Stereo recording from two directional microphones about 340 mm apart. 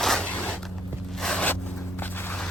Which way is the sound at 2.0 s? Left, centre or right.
Centre.